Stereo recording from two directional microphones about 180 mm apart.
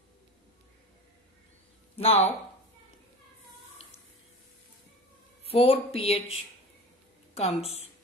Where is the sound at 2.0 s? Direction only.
35° left (ahead or behind).